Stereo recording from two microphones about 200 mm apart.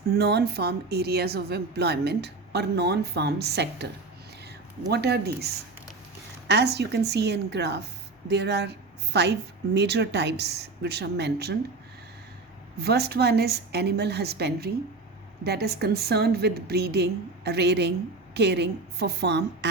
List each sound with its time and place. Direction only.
0.2 s speech: 55° right (ahead or behind)
4.9 s a woman's voice: 55° right (ahead or behind)
12.8 s a woman's voice: 55° right (ahead or behind)